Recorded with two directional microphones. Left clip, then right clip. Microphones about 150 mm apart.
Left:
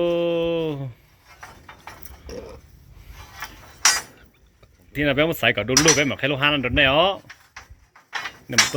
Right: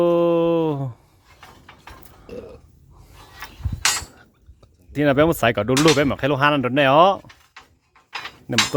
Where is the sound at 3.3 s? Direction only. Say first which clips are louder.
Left 1 dB; centre (ahead or behind).